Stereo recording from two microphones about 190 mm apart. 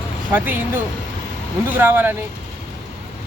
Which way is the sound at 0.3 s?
10° right (ahead or behind).